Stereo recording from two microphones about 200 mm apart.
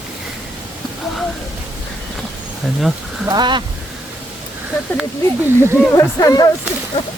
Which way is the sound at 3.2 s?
20° right (ahead or behind).